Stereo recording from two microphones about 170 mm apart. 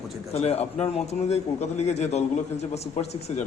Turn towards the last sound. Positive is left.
turn(degrees=40)  # may be behind; listen again after turning